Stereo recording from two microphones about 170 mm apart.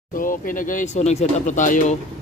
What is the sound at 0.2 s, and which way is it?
Speech, 55° left (ahead or behind).